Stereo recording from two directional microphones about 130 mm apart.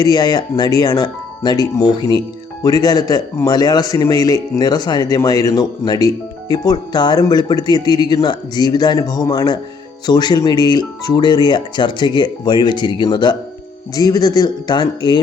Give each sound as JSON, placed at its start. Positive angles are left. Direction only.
{"t": 0.0, "sound": "speech", "side_deg": 30}